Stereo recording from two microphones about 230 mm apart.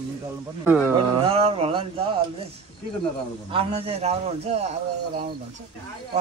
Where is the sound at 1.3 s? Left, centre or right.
Right.